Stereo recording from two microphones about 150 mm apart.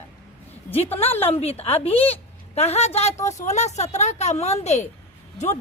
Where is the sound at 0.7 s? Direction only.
15° left (ahead or behind).